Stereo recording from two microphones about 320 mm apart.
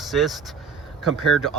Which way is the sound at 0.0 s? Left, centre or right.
Centre.